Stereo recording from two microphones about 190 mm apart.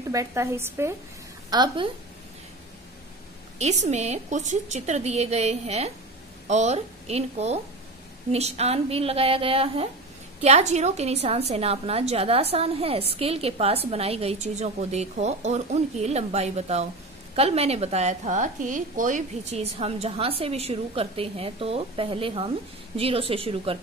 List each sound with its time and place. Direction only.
0.1 s a woman's voice: 15° right (ahead or behind)
3.5 s a woman's voice: 35° right (ahead or behind)